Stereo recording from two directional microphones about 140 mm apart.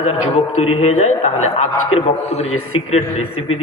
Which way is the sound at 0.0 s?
50° left (ahead or behind).